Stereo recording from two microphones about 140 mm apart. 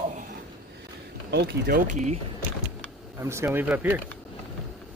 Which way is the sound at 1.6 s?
80° right.